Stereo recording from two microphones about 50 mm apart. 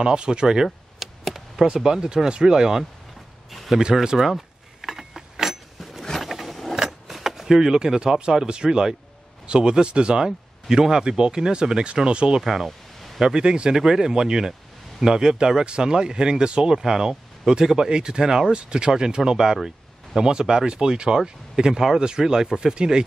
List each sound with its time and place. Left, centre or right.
0.0 s speech: centre
0.9 s a sound: centre
2.2 s speech: centre
4.8 s a sound: centre
6.0 s vehicle: centre
6.8 s speech: centre
12.4 s speech: centre
12.6 s a sound: centre
13.2 s speech: centre